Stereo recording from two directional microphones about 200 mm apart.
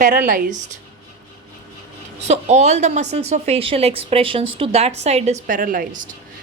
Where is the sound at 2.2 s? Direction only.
35° right (ahead or behind).